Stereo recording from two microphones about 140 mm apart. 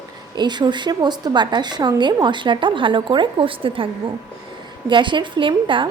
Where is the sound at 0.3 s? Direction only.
30° right (ahead or behind).